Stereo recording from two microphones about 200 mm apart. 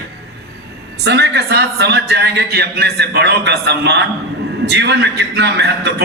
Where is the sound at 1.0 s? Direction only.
55° right (ahead or behind).